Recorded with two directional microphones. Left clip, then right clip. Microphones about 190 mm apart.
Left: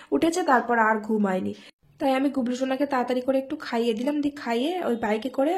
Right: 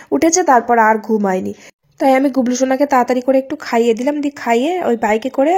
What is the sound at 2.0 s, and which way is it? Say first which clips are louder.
A woman's voice: right 11 dB; 35° right (ahead or behind).